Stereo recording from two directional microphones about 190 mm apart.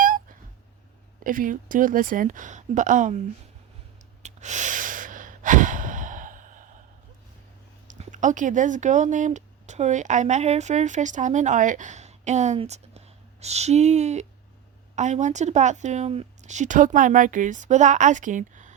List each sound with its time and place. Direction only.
0.0 s a sound: 45° right (ahead or behind)
1.2 s speech: 45° right (ahead or behind)
4.2 s breathing: 40° right (ahead or behind)
7.9 s speech: 40° right (ahead or behind)